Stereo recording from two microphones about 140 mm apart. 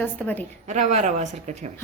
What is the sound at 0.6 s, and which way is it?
Speech, 55° right (ahead or behind).